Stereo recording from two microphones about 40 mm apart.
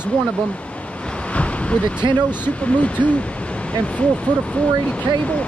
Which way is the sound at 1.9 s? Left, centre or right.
Left.